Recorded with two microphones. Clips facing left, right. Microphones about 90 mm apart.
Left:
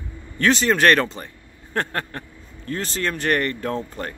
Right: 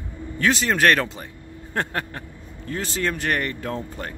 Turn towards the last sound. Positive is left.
turn(degrees=-5)  # may be behind; listen again after turning